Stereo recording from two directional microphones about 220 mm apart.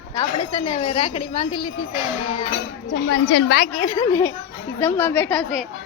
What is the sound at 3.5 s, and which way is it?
A woman's voice, 30° left (ahead or behind).